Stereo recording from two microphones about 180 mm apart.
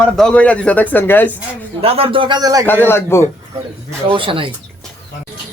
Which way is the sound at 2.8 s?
15° left (ahead or behind).